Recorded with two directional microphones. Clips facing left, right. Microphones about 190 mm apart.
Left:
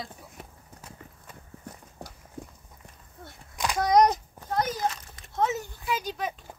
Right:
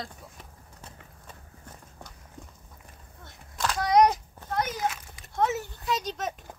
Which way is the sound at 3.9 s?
40° left (ahead or behind).